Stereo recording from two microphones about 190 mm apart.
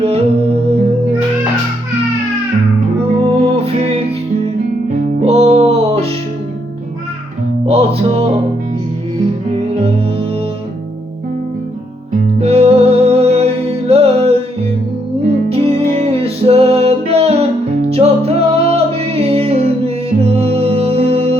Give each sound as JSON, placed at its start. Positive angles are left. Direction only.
{"t": 0.0, "sound": "music", "side_deg": -30}
{"t": 3.2, "sound": "music", "side_deg": -30}
{"t": 5.2, "sound": "music", "side_deg": -35}
{"t": 7.7, "sound": "music", "side_deg": -30}
{"t": 9.7, "sound": "music", "side_deg": -30}
{"t": 12.4, "sound": "music", "side_deg": -35}